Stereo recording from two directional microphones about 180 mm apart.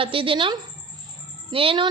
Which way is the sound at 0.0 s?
30° right (ahead or behind).